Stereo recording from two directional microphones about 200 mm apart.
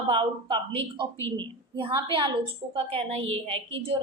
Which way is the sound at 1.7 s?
25° right (ahead or behind).